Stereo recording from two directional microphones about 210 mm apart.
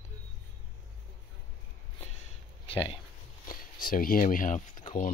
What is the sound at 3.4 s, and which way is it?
Speech, 45° left (ahead or behind).